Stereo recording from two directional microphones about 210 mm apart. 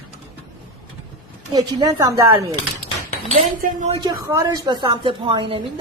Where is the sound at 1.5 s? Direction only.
20° right (ahead or behind).